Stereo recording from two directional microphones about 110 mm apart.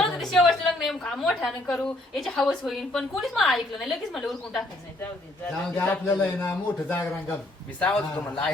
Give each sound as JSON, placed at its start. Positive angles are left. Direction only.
{"t": 0.0, "sound": "a woman's voice", "side_deg": 0}
{"t": 5.7, "sound": "a man's voice", "side_deg": 20}
{"t": 7.8, "sound": "speech", "side_deg": 10}